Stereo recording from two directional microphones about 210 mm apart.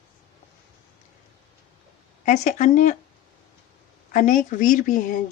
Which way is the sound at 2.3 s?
35° left (ahead or behind).